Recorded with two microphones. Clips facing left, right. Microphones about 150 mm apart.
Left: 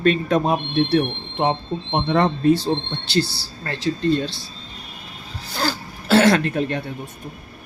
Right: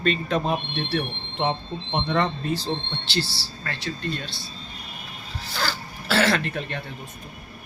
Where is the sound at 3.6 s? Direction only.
30° left (ahead or behind).